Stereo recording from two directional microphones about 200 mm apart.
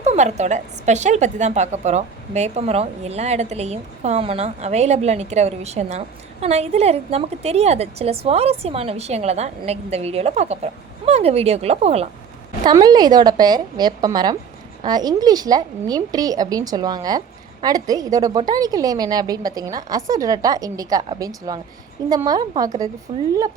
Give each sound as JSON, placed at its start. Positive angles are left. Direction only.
{"t": 0.0, "sound": "a woman's voice", "side_deg": -35}
{"t": 12.6, "sound": "a woman's voice", "side_deg": -20}